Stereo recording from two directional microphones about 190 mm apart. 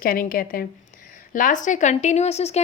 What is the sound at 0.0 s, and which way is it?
A woman's voice, 50° left (ahead or behind).